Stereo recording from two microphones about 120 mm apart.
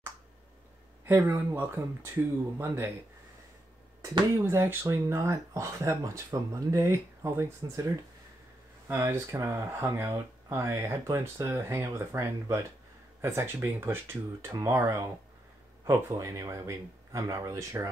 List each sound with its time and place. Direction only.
1.0 s speech: 15° right (ahead or behind)
2.6 s speech: 20° right (ahead or behind)
4.5 s speech: 20° right (ahead or behind)
8.8 s speech: 20° right (ahead or behind)